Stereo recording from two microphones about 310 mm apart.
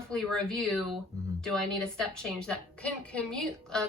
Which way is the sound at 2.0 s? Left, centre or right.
Centre.